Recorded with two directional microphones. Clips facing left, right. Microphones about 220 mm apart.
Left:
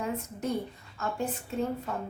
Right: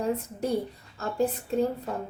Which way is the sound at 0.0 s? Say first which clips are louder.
Right 4 dB; 35° right (ahead or behind).